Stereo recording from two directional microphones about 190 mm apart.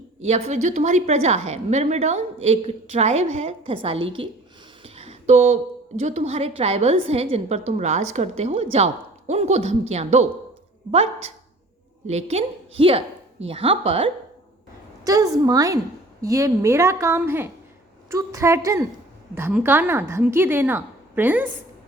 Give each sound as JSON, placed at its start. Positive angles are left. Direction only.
{"t": 0.2, "sound": "a woman's voice", "side_deg": -35}
{"t": 4.8, "sound": "a sound", "side_deg": -30}
{"t": 6.0, "sound": "a woman's voice", "side_deg": -35}
{"t": 15.0, "sound": "a woman's voice", "side_deg": -20}